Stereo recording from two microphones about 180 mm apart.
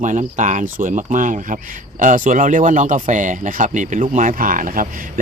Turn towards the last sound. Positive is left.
turn(degrees=-50)  # may be behind; listen again after turning